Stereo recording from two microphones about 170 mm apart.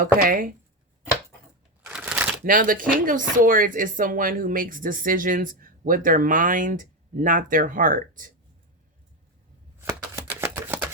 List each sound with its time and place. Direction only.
0.0 s speech: 55° right (ahead or behind)
1.9 s shuffling cards: 5° right (ahead or behind)
2.4 s speech: 55° right (ahead or behind)
9.8 s shuffling cards: 15° right (ahead or behind)